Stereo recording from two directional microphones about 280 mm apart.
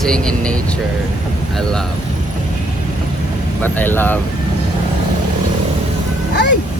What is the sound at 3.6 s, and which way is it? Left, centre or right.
Speech, centre.